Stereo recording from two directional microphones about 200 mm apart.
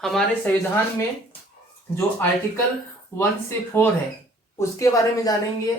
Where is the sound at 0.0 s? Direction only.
Centre (ahead or behind).